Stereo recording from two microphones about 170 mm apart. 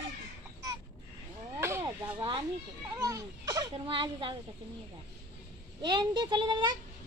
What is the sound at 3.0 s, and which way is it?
A child's voice, 20° right (ahead or behind).